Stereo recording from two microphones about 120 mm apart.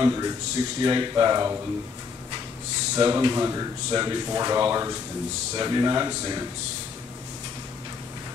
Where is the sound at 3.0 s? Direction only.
35° right (ahead or behind).